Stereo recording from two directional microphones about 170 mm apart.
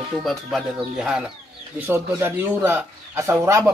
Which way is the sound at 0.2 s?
Centre (ahead or behind).